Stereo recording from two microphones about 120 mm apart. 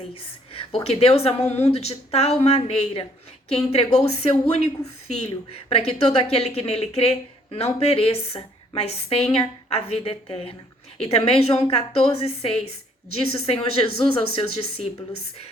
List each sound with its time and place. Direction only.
0.1 s speech: 50° left (ahead or behind)